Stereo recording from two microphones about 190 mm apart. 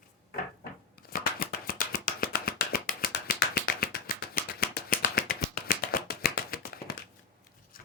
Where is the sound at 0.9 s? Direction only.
55° left (ahead or behind).